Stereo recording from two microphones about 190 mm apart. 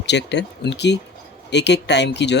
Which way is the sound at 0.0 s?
65° left (ahead or behind).